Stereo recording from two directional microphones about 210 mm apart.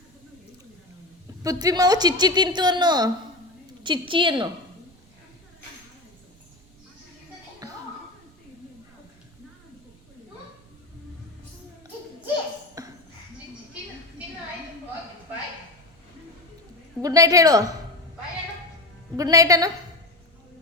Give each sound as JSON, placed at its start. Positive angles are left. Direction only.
{"t": 1.4, "sound": "a woman's voice", "side_deg": -15}
{"t": 7.6, "sound": "music", "side_deg": -15}
{"t": 12.8, "sound": "a sound", "side_deg": -15}
{"t": 17.0, "sound": "a woman's voice", "side_deg": -15}
{"t": 19.1, "sound": "a woman's voice", "side_deg": -15}